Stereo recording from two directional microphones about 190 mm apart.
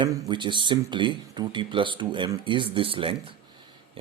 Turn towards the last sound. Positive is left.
turn(degrees=-30)  # may be behind; listen again after turning